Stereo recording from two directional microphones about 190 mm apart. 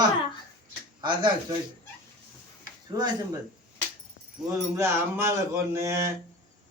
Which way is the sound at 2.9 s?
20° right (ahead or behind).